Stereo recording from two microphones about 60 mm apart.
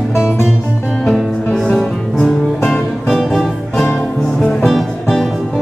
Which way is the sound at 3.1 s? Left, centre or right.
Centre.